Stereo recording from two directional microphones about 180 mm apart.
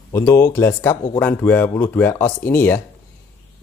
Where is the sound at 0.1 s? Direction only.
15° left (ahead or behind).